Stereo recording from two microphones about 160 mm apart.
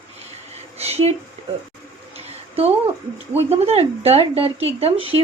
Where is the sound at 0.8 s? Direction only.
40° right (ahead or behind).